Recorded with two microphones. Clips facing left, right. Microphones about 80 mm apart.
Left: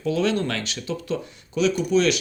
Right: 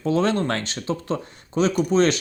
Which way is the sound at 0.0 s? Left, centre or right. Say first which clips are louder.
Right 2 dB; right.